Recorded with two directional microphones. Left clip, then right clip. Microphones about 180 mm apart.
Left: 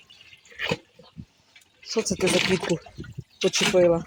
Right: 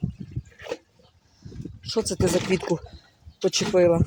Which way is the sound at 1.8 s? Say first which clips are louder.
Even; centre (ahead or behind).